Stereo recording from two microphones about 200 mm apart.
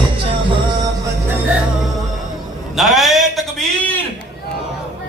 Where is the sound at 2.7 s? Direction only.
Centre (ahead or behind).